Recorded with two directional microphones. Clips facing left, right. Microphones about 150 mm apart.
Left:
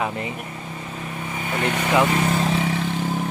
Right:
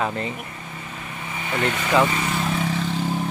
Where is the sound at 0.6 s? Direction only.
20° left (ahead or behind).